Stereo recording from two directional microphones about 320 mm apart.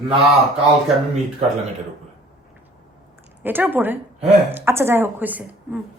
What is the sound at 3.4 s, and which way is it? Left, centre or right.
Speech, centre.